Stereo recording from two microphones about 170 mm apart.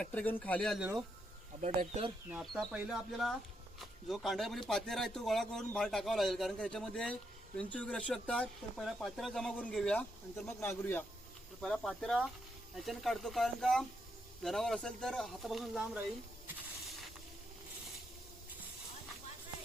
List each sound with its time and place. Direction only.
0.0 s speech: 10° left (ahead or behind)
1.6 s speech: 40° right (ahead or behind)
2.3 s a man's voice: centre (ahead or behind)